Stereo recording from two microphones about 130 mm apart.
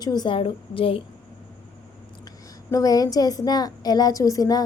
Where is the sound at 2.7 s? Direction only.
25° left (ahead or behind).